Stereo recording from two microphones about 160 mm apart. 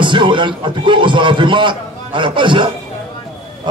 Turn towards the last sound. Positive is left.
turn(degrees=-30)  # may be behind; listen again after turning